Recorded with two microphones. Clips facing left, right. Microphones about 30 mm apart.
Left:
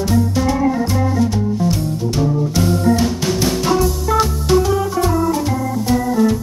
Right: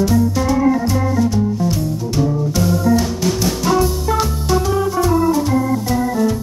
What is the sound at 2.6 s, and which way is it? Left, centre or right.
Music, left.